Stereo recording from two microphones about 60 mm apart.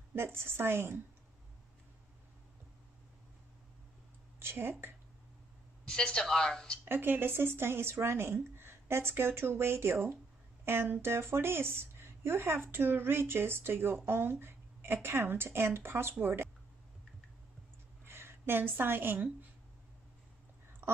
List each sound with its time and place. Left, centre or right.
0.1 s speech: right
4.4 s speech: right
5.9 s a woman's voice: centre
6.8 s speech: right
18.0 s a sound: right
20.8 s a sound: right